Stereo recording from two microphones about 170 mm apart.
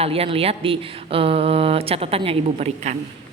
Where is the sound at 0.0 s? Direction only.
35° right (ahead or behind).